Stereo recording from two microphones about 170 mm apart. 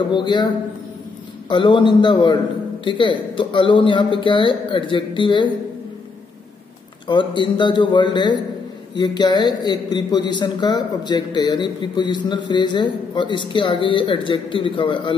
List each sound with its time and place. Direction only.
0.1 s a man's voice: 25° left (ahead or behind)
1.5 s a man's voice: 30° left (ahead or behind)
7.1 s a man's voice: 30° left (ahead or behind)